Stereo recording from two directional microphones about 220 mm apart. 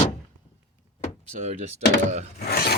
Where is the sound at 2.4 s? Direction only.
45° left (ahead or behind).